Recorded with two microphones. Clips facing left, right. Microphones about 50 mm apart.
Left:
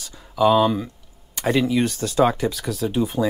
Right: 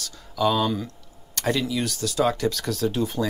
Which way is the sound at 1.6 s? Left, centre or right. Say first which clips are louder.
Left 5 dB; left.